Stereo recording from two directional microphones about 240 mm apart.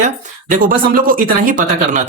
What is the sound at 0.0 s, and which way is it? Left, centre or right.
Speech, right.